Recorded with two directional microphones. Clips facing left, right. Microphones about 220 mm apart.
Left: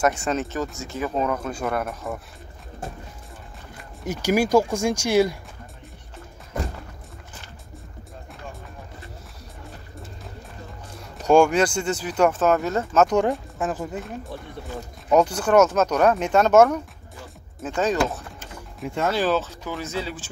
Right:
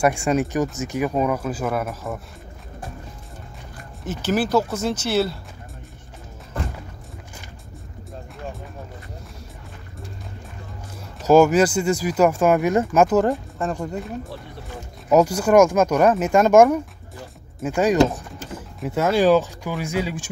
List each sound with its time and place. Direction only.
0.0 s speech: 10° right (ahead or behind)
4.0 s speech: 10° left (ahead or behind)
11.2 s speech: 5° right (ahead or behind)
18.8 s speech: 5° right (ahead or behind)